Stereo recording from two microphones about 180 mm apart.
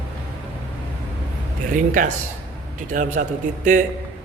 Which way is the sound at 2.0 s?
45° right (ahead or behind).